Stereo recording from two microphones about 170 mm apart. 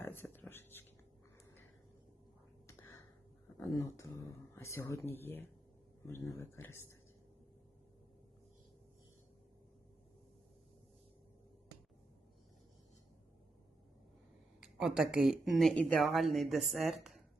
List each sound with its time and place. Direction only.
0.0 s a sound: 10° left (ahead or behind)
2.6 s whispering: 15° left (ahead or behind)
3.6 s speech: 20° left (ahead or behind)
14.6 s speech: 5° right (ahead or behind)